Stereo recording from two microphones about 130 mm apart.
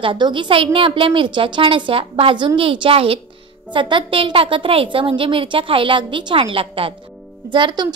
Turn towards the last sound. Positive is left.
turn(degrees=-35)  # may be behind; listen again after turning